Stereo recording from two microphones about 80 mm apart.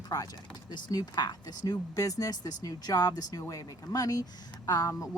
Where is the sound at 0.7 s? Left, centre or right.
Left.